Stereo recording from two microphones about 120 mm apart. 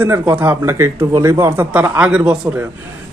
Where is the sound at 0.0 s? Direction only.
20° right (ahead or behind).